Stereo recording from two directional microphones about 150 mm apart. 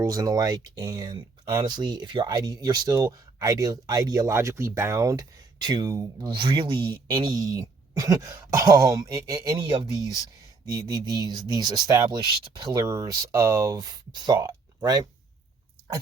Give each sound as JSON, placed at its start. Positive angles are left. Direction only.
{"t": 0.0, "sound": "speech", "side_deg": -25}
{"t": 10.7, "sound": "speech", "side_deg": -25}